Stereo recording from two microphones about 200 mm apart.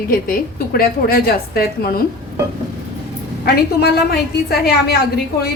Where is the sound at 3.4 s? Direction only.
50° left (ahead or behind).